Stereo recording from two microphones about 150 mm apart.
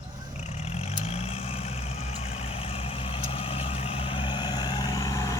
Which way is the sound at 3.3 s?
40° left (ahead or behind).